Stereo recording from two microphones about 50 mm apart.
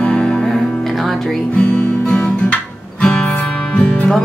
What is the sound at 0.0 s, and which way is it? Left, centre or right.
Music, centre.